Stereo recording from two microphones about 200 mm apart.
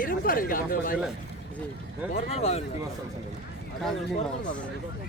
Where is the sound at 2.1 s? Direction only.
30° left (ahead or behind).